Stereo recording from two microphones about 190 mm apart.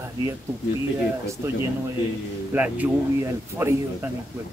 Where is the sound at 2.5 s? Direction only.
10° right (ahead or behind).